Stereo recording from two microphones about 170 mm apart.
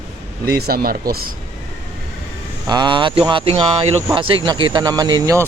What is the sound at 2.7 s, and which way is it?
Speech, 25° right (ahead or behind).